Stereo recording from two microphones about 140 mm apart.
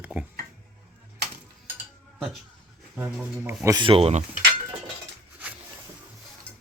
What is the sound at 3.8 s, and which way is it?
Speech, 40° right (ahead or behind).